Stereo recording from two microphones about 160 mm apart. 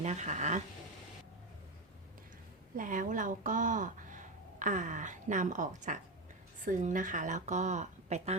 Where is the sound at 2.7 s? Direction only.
55° right (ahead or behind).